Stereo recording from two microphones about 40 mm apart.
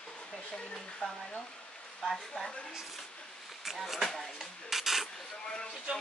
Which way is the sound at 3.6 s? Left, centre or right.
Centre.